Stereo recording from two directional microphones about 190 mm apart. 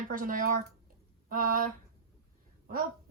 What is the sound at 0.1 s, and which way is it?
A woman's voice, 45° right (ahead or behind).